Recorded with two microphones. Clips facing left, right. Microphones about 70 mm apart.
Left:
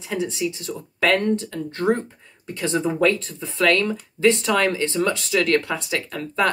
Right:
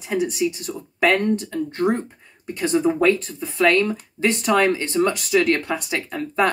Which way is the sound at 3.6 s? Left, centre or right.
Centre.